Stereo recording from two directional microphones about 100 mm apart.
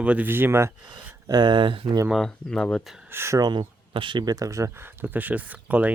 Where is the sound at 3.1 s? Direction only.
25° right (ahead or behind).